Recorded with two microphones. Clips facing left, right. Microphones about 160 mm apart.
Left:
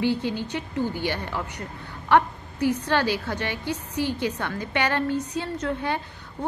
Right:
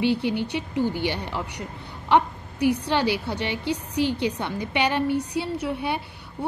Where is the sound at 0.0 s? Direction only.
15° right (ahead or behind).